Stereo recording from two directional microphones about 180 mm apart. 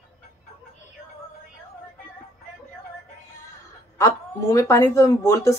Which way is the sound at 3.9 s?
15° left (ahead or behind).